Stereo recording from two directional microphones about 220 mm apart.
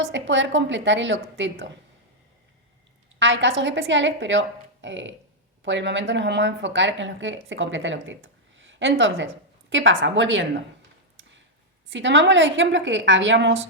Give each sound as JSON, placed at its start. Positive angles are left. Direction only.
{"t": 0.0, "sound": "speech", "side_deg": -55}
{"t": 3.2, "sound": "speech", "side_deg": -55}
{"t": 11.2, "sound": "a sound", "side_deg": -55}
{"t": 11.9, "sound": "speech", "side_deg": -55}